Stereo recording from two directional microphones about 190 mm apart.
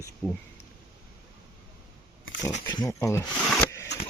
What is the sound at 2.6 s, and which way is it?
Speech, 20° left (ahead or behind).